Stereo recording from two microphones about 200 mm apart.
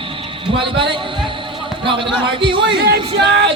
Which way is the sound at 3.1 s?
60° right (ahead or behind).